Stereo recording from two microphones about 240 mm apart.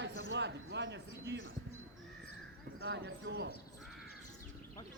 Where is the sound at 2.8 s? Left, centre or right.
Right.